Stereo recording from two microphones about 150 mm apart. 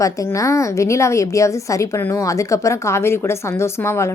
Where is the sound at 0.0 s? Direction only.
20° left (ahead or behind).